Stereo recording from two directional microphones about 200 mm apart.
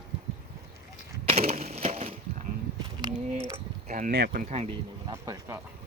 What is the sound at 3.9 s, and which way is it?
Speech, 40° right (ahead or behind).